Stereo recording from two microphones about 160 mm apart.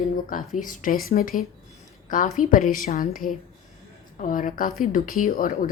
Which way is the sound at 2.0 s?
50° left (ahead or behind).